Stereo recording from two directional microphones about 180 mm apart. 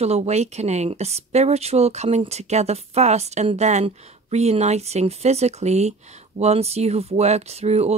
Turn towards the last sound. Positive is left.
turn(degrees=-35)  # may be behind; listen again after turning